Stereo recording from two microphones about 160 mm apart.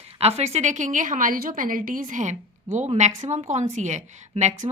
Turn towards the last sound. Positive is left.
turn(degrees=-50)  # may be behind; listen again after turning